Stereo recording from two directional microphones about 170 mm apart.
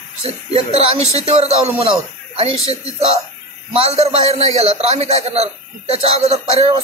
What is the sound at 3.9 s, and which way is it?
A man's voice, 35° right (ahead or behind).